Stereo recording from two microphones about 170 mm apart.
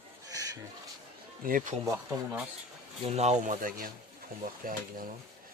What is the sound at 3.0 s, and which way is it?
A man's voice, 40° right (ahead or behind).